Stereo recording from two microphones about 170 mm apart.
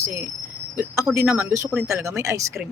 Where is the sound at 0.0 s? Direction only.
15° right (ahead or behind).